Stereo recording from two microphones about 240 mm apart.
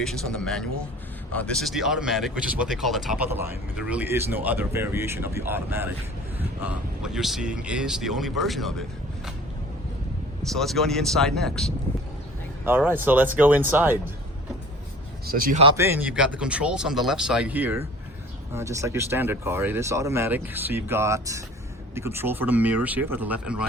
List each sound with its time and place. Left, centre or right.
0.0 s speech: centre
7.0 s speech: centre
10.4 s speech: centre
15.3 s speech: right
15.6 s speech: centre